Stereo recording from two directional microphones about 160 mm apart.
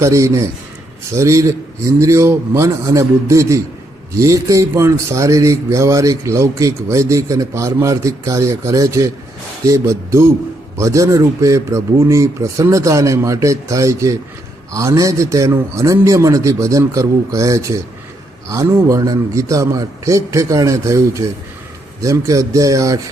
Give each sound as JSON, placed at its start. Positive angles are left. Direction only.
{"t": 0.0, "sound": "a man's voice", "side_deg": -20}